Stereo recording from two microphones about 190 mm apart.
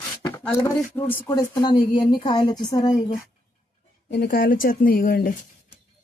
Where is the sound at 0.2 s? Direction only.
15° left (ahead or behind).